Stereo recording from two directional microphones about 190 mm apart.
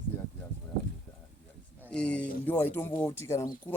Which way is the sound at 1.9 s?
5° left (ahead or behind).